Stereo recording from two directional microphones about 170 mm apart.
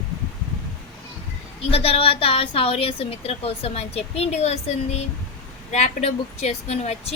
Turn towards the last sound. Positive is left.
turn(degrees=40)  # may be behind; listen again after turning